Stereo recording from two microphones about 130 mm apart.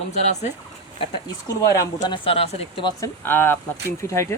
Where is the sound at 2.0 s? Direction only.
40° left (ahead or behind).